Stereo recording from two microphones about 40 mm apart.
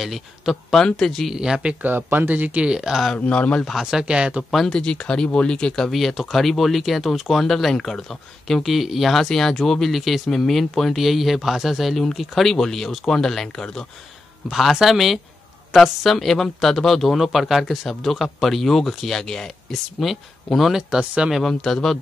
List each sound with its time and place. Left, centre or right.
0.0 s speech: centre
1.3 s speech: centre
1.8 s speech: right
2.6 s speech: right
3.2 s speech: left
3.8 s speech: right
4.5 s speech: centre
4.7 s speech: left
5.9 s speech: centre
11.9 s speech: centre
14.5 s speech: centre
17.6 s speech: centre
21.0 s speech: right
21.5 s speech: centre